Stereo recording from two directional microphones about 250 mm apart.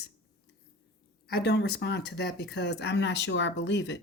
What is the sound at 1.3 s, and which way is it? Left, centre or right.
Speech, left.